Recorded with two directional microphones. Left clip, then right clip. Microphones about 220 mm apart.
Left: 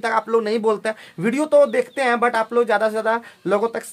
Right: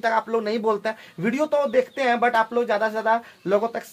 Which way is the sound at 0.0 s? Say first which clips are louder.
Left 3 dB; 45° left (ahead or behind).